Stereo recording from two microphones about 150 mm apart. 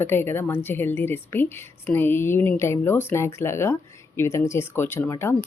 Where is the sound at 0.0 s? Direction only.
15° left (ahead or behind).